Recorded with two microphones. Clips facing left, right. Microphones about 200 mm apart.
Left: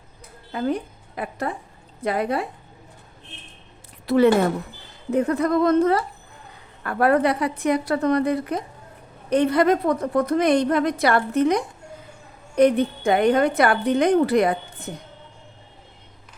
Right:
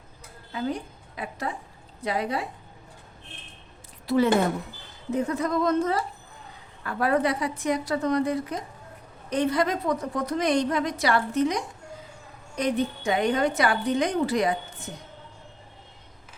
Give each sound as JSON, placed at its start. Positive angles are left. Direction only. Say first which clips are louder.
{"t": 0.5, "sound": "a woman's voice", "louder": "left 5 dB", "side_deg": 55}
{"t": 4.0, "sound": "a woman's voice", "louder": "left 5 dB", "side_deg": 65}